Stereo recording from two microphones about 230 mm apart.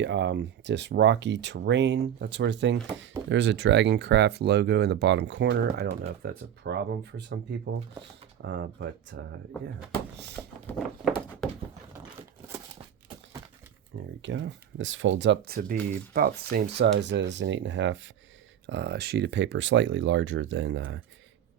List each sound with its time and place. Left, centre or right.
0.0 s speech: right
10.7 s a sound: centre
14.2 s speech: right